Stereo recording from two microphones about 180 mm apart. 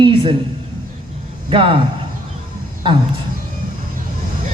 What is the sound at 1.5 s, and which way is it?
Speech, 30° right (ahead or behind).